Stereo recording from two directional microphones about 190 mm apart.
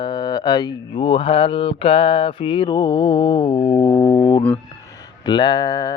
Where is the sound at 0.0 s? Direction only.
20° left (ahead or behind).